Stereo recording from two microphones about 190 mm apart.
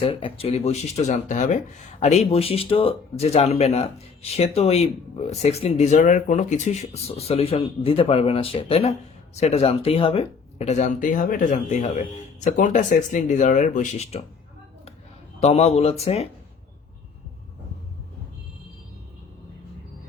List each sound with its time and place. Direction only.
0.0 s speech: 30° left (ahead or behind)
15.4 s speech: 35° left (ahead or behind)